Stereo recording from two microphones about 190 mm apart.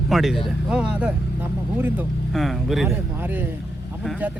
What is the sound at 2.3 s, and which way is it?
Speech, centre (ahead or behind).